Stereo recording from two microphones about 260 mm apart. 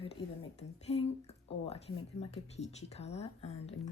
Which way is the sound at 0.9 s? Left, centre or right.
Left.